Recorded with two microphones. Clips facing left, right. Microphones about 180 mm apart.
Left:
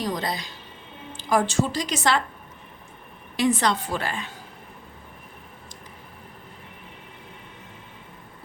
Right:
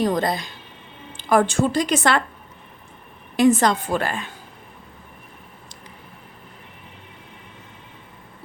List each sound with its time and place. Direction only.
0.0 s a woman's voice: 50° right (ahead or behind)
3.3 s a woman's voice: 45° right (ahead or behind)